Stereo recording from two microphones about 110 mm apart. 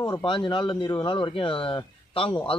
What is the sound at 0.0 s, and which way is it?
Speech, 45° left (ahead or behind).